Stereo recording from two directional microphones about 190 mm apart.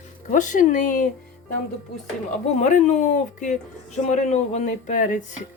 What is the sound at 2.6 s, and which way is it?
Speech, 40° left (ahead or behind).